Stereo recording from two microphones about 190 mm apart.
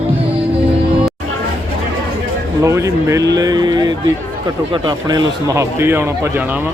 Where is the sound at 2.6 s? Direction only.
15° right (ahead or behind).